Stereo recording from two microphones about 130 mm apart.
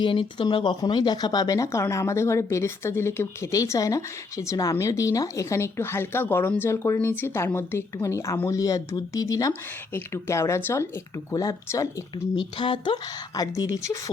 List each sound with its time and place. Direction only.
0.0 s speech: 40° left (ahead or behind); by 12.4 s 25° left (ahead or behind)
12.4 s speech: 40° left (ahead or behind); by 14.0 s 25° left (ahead or behind)